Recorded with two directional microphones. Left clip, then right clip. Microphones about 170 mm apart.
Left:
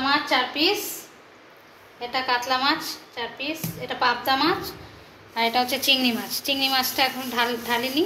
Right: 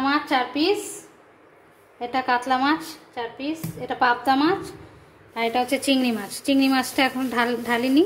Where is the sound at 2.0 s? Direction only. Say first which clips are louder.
Right 2 dB; 70° right (ahead or behind).